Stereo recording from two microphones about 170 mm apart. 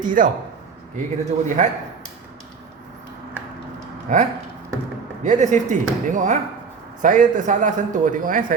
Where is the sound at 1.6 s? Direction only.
45° right (ahead or behind).